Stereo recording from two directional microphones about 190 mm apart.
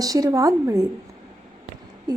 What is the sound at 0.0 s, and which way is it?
Speech, 20° right (ahead or behind).